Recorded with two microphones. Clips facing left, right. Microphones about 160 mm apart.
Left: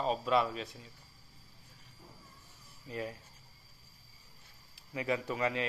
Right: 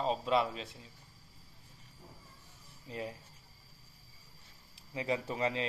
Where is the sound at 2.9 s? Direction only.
25° right (ahead or behind).